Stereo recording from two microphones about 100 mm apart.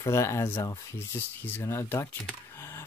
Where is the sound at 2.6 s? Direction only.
25° left (ahead or behind).